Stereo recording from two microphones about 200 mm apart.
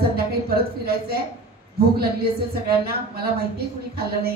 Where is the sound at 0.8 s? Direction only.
50° right (ahead or behind).